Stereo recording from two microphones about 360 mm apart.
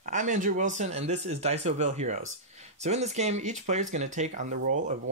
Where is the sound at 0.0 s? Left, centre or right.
Right.